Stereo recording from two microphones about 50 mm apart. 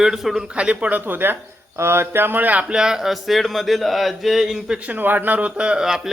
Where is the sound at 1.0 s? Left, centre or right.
Right.